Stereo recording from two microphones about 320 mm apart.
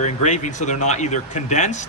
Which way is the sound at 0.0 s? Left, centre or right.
Left.